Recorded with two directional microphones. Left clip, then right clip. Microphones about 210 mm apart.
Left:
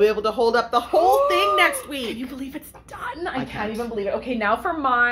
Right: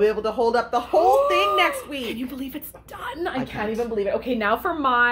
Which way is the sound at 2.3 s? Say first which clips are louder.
Even; 20° right (ahead or behind).